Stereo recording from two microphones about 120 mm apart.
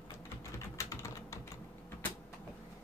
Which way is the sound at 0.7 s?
20° left (ahead or behind).